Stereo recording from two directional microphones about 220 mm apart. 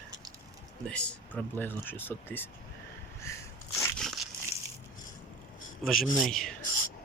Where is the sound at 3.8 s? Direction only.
5° left (ahead or behind).